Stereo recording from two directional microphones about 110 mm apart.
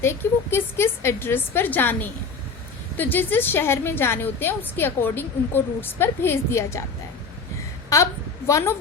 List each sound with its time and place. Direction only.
0.0 s a woman's voice: 20° left (ahead or behind)
8.4 s a woman's voice: 25° left (ahead or behind)